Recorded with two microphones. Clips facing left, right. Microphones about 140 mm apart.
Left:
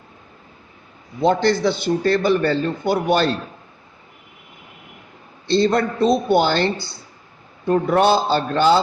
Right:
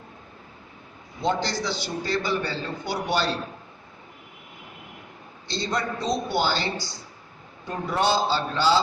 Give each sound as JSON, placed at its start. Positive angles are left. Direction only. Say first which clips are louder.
{"t": 1.2, "sound": "a man's voice", "louder": "left 9 dB", "side_deg": 55}
{"t": 5.5, "sound": "a man's voice", "louder": "left 11 dB", "side_deg": 55}